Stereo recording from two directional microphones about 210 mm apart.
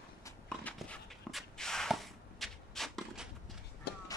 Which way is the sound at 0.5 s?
5° left (ahead or behind).